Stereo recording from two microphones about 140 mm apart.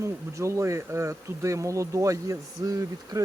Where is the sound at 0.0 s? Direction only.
20° right (ahead or behind).